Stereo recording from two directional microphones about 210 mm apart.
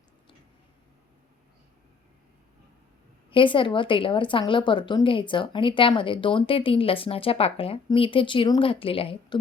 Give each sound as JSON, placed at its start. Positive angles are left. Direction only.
{"t": 3.2, "sound": "speech", "side_deg": 25}